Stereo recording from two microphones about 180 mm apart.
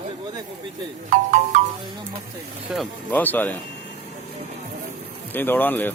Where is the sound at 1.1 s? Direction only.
45° right (ahead or behind).